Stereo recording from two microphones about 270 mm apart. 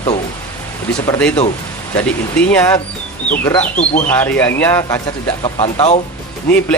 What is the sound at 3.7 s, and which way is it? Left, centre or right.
Speech, left.